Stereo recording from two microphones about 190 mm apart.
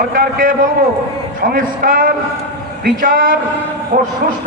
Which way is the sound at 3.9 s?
45° right (ahead or behind).